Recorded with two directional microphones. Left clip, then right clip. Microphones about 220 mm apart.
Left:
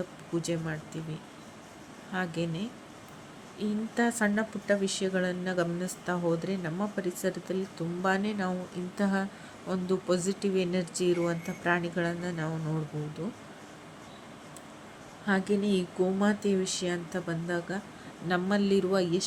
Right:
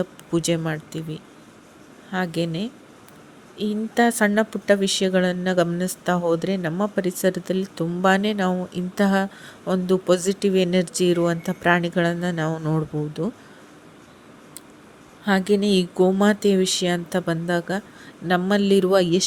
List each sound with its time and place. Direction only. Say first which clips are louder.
0.3 s speech: right 10 dB; 40° right (ahead or behind)
2.1 s speech: right 8 dB; 35° right (ahead or behind)
15.3 s speech: right 9 dB; 40° right (ahead or behind)